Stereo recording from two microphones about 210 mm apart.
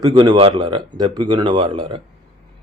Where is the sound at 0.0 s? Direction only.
20° right (ahead or behind).